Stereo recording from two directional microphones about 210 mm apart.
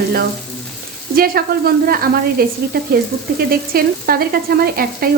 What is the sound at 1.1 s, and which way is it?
Frying, 45° right (ahead or behind).